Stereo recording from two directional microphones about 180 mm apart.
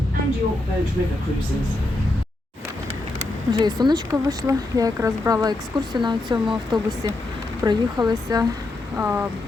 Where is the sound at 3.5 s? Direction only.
25° right (ahead or behind).